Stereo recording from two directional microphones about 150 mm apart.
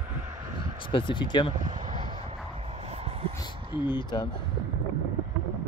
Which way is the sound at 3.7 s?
30° left (ahead or behind).